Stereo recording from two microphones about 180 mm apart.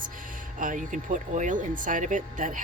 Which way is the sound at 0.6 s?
45° right (ahead or behind).